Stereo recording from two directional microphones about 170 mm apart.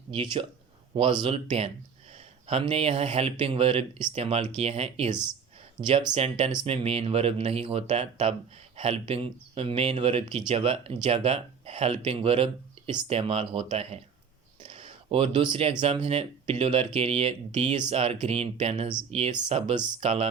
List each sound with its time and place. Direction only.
0.1 s speech: 30° right (ahead or behind)
14.6 s a sound: 35° right (ahead or behind)
16.0 s speech: 35° right (ahead or behind)